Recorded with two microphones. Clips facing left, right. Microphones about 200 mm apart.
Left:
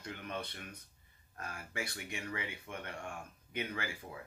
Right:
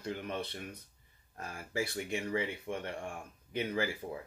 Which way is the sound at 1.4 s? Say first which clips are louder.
Right 6 dB; 30° right (ahead or behind).